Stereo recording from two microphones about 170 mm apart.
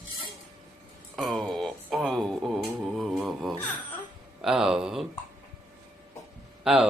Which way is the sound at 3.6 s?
10° left (ahead or behind).